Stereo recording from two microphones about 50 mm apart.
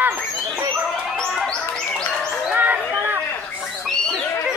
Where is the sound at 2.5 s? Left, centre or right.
Right.